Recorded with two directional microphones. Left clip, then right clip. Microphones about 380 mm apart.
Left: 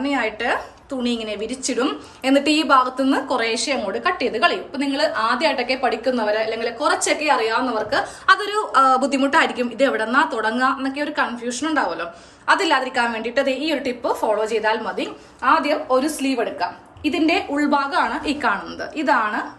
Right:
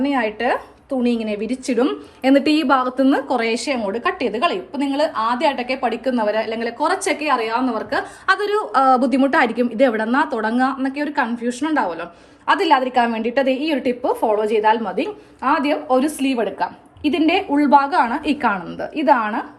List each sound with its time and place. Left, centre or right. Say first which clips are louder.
0.0 s a woman's voice: right 2 dB; centre